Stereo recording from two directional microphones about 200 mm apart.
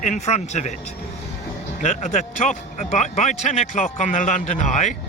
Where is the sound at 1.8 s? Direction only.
35° left (ahead or behind).